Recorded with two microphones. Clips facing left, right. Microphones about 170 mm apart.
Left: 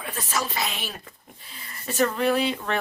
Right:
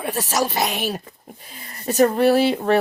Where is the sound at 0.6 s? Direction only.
45° right (ahead or behind).